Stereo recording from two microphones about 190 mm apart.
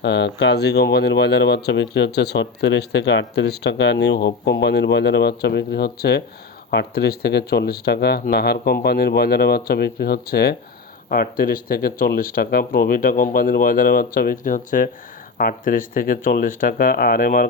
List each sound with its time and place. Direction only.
0.0 s speech: 65° left (ahead or behind); by 17.4 s 50° left (ahead or behind)